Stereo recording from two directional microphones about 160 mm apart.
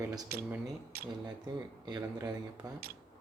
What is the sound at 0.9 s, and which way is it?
Speech, 70° right (ahead or behind).